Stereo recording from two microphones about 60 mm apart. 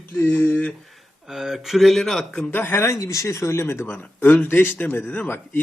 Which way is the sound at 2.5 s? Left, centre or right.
Left.